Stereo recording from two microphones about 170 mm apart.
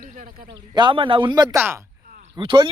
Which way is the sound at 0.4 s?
25° right (ahead or behind).